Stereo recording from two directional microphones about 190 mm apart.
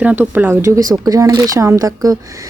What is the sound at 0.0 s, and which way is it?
Speech, 10° right (ahead or behind).